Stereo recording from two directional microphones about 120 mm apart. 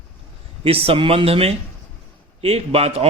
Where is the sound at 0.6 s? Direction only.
50° right (ahead or behind).